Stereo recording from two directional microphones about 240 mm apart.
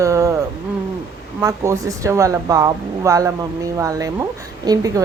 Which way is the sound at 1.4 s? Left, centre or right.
Centre.